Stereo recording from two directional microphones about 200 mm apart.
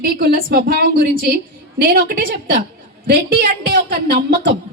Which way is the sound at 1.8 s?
50° right (ahead or behind).